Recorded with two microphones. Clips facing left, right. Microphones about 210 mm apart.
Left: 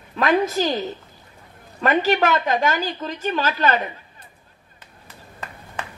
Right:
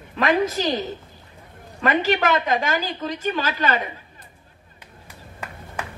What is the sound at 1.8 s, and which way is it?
A woman's voice, 45° left (ahead or behind).